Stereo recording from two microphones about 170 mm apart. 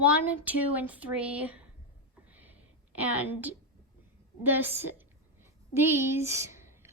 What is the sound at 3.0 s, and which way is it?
A woman's voice, 10° right (ahead or behind).